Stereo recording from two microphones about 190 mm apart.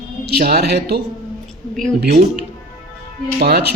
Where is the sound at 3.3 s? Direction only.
60° right (ahead or behind).